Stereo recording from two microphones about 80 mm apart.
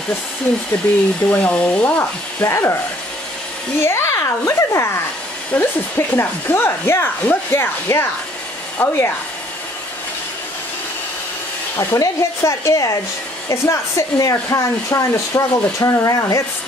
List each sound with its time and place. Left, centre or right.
1.3 s speech: centre
2.4 s speech: left
3.8 s speech: left
11.7 s speech: left